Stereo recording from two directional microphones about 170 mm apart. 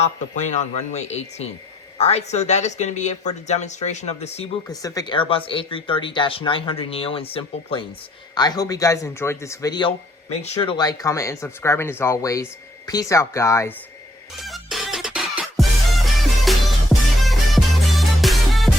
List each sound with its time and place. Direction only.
0.0 s speech: 45° left (ahead or behind)
4.7 s speech: 20° left (ahead or behind)
8.4 s speech: 25° left (ahead or behind)
10.2 s speech: 40° left (ahead or behind); by 13.7 s 15° left (ahead or behind)
14.4 s music: centre (ahead or behind)